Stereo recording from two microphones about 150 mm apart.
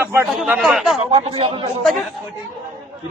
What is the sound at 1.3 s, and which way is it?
Speech, 35° right (ahead or behind).